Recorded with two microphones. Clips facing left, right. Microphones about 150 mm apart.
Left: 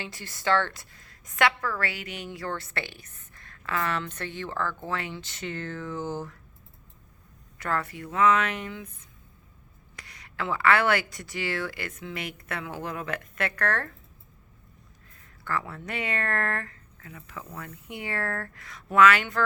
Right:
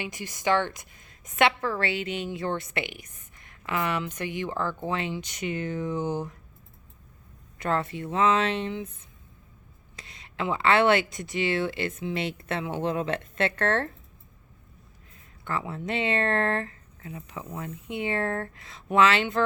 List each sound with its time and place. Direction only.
0.0 s a woman's voice: 15° right (ahead or behind)
7.6 s speech: 25° right (ahead or behind)
9.9 s speech: 25° right (ahead or behind)
15.4 s speech: 20° right (ahead or behind)